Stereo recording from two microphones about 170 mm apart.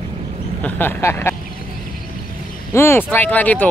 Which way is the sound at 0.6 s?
10° left (ahead or behind).